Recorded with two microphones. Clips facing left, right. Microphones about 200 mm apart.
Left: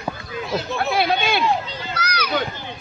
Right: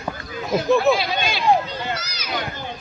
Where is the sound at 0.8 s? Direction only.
60° left (ahead or behind).